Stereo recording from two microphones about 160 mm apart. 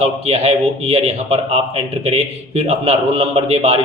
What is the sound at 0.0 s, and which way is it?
Speech, 40° right (ahead or behind).